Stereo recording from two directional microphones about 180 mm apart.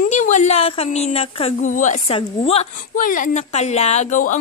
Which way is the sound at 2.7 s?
50° left (ahead or behind).